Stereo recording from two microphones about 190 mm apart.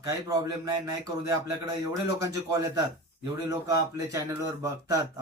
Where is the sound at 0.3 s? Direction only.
20° right (ahead or behind).